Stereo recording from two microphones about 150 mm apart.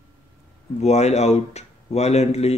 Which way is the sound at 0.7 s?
50° left (ahead or behind).